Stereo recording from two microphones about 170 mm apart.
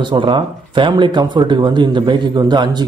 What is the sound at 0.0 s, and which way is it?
A man's voice, 30° right (ahead or behind).